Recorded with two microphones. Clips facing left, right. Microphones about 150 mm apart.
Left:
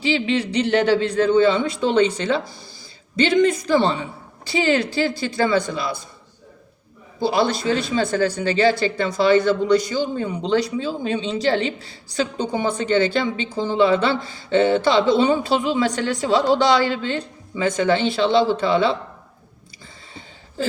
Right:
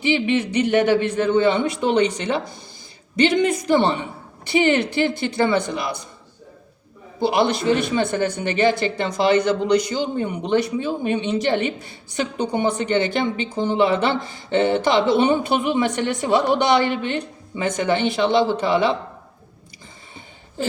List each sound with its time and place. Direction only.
0.0 s a woman's voice: 20° right (ahead or behind)
7.2 s a woman's voice: 20° right (ahead or behind)